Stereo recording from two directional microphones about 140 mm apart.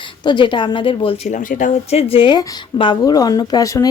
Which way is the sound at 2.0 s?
40° left (ahead or behind).